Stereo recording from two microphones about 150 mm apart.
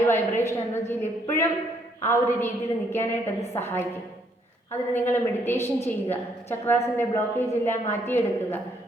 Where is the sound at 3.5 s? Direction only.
15° left (ahead or behind).